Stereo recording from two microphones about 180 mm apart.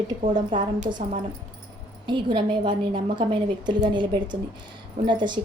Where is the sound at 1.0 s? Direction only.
35° right (ahead or behind).